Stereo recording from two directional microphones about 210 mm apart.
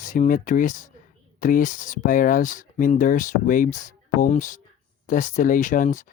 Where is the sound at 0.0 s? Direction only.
40° left (ahead or behind).